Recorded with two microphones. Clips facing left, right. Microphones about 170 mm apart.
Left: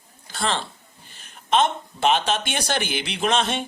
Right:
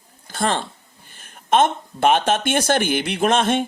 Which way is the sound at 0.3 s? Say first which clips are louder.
Right 4 dB; 50° right (ahead or behind).